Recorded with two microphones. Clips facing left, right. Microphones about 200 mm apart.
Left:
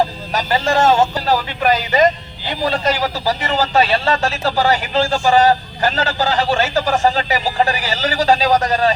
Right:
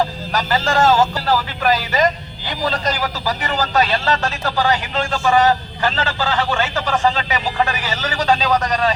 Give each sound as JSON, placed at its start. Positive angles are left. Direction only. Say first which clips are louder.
{"t": 0.3, "sound": "speech", "louder": "left 1 dB", "side_deg": 25}